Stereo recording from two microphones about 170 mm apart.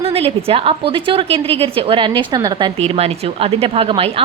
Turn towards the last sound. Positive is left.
turn(degrees=-35)  # may be behind; listen again after turning